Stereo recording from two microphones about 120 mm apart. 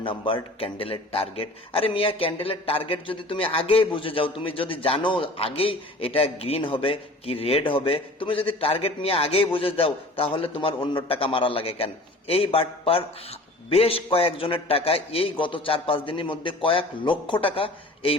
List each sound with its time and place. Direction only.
0.0 s a man's voice: 45° left (ahead or behind)